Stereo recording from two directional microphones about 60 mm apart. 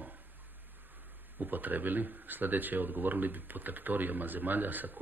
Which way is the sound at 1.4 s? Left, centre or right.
Right.